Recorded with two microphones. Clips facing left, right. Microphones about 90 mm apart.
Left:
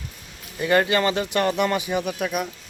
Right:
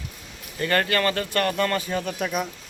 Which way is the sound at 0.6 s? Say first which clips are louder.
Left 3 dB; 15° left (ahead or behind).